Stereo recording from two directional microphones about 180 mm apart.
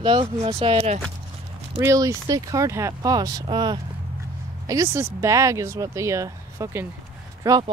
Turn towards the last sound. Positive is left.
turn(degrees=-20)  # may be behind; listen again after turning